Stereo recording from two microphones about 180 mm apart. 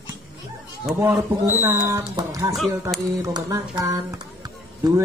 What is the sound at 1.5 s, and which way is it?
Speech, 15° right (ahead or behind).